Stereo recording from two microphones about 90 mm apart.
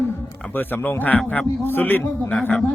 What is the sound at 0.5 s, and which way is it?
Music, 20° left (ahead or behind).